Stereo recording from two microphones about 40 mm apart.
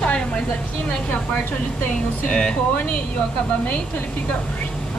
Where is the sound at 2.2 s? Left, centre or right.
Left.